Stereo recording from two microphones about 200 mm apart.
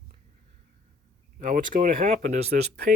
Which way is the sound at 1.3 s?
40° right (ahead or behind).